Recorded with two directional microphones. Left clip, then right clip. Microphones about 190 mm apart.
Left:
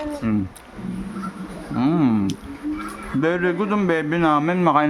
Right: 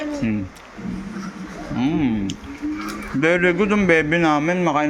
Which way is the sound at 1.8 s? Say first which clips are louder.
Left 2 dB; 30° left (ahead or behind).